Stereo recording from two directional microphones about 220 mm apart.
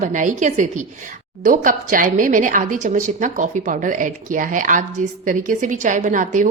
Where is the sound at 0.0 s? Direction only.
35° right (ahead or behind).